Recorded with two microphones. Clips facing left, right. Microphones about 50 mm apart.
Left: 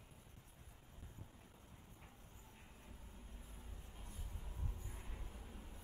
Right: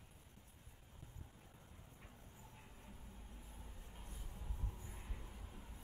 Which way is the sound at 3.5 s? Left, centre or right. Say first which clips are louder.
Even; centre.